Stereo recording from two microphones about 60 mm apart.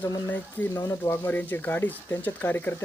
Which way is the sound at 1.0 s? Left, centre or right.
Left.